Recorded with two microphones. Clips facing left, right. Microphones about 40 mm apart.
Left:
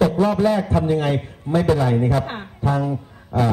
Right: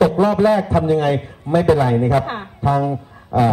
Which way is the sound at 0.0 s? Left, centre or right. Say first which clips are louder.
Right 3 dB; centre.